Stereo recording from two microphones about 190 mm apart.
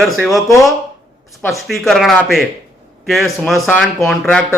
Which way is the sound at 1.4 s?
Centre (ahead or behind).